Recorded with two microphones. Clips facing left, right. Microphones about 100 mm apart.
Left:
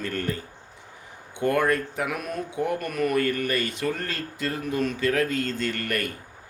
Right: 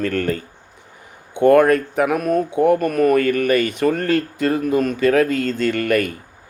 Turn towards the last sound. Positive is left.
turn(degrees=-65)  # may be behind; listen again after turning